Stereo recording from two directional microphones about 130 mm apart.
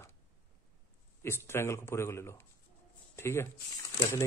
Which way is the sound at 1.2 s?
20° left (ahead or behind).